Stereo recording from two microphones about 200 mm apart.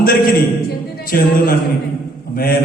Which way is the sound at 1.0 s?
45° left (ahead or behind).